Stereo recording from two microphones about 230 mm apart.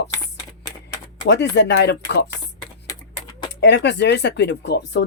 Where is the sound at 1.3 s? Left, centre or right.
Left.